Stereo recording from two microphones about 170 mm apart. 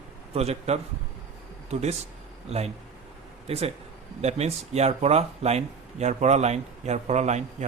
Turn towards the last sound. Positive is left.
turn(degrees=-40)  # may be behind; listen again after turning